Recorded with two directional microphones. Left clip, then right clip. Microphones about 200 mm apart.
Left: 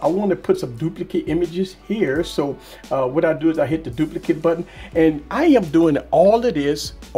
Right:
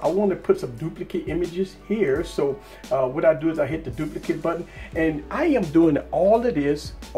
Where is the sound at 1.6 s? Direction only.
45° left (ahead or behind).